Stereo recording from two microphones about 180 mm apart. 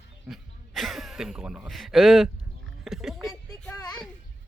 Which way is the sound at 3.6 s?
5° left (ahead or behind).